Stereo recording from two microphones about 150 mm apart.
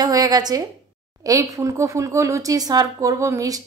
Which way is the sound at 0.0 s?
25° right (ahead or behind).